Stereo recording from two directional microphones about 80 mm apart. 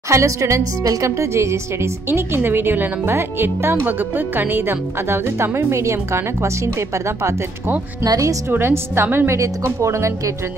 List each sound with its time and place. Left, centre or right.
0.1 s speech: right
8.0 s speech: right
8.5 s speech: right